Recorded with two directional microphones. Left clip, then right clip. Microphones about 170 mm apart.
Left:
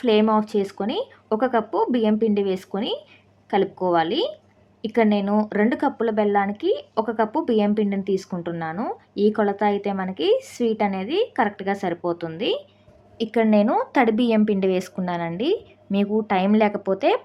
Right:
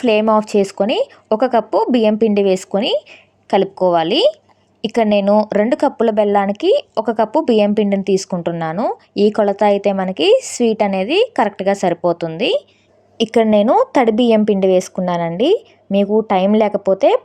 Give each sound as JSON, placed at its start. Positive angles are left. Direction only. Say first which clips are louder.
{"t": 0.0, "sound": "speech", "louder": "right 6 dB", "side_deg": -40}